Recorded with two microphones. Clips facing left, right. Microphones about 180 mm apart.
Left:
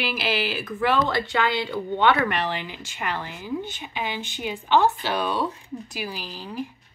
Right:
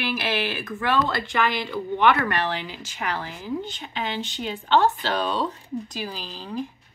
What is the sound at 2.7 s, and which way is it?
Speech, 15° left (ahead or behind).